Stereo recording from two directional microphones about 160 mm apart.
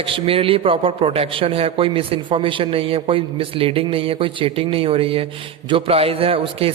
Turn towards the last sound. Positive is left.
turn(degrees=-35)  # may be behind; listen again after turning